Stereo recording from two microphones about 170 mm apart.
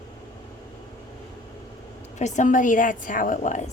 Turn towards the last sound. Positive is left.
turn(degrees=45)  # may be behind; listen again after turning